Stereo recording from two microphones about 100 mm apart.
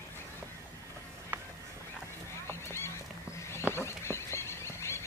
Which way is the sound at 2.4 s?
25° left (ahead or behind).